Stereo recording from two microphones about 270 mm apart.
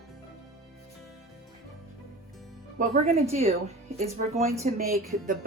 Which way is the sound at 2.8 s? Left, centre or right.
Right.